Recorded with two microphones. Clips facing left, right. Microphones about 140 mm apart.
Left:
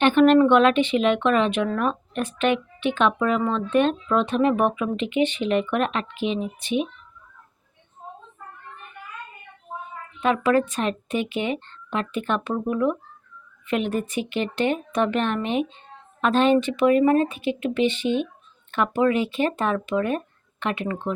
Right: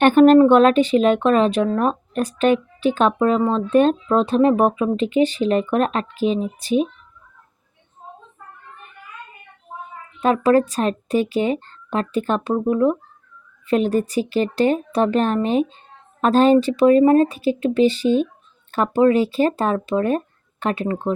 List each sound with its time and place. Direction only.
0.0 s speech: 40° right (ahead or behind)
10.2 s speech: 35° right (ahead or behind)